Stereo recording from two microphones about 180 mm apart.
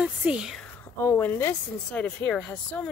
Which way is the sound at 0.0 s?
5° right (ahead or behind).